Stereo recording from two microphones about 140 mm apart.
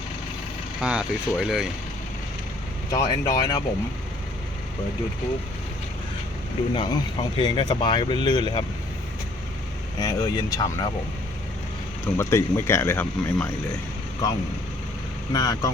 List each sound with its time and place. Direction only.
0.8 s speech: 5° right (ahead or behind)
2.9 s speech: 25° left (ahead or behind)
6.7 s speech: 30° left (ahead or behind)
10.0 s speech: 25° left (ahead or behind)
12.0 s speech: 20° left (ahead or behind)
14.2 s speech: 25° left (ahead or behind)